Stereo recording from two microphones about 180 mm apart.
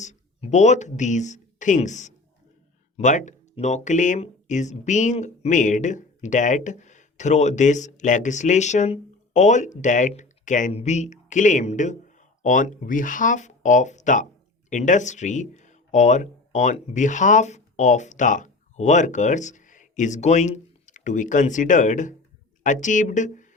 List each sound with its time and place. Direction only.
0.0 s speech: 40° left (ahead or behind)